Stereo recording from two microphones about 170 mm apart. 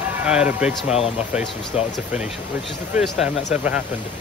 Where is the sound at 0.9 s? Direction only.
40° left (ahead or behind).